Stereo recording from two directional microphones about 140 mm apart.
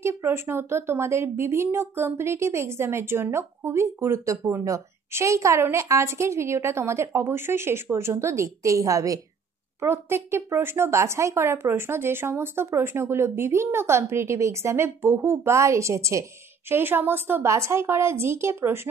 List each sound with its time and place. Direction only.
0.0 s speech: 20° right (ahead or behind)